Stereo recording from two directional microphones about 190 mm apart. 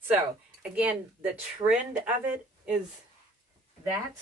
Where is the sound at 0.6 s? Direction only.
5° right (ahead or behind).